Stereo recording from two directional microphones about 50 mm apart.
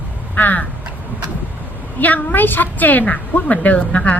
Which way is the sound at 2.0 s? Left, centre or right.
Left.